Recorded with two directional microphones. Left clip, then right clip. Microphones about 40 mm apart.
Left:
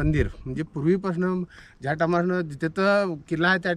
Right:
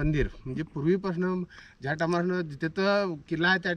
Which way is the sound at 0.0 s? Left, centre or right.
Left.